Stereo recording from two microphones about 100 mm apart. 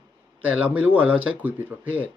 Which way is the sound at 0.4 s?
15° right (ahead or behind).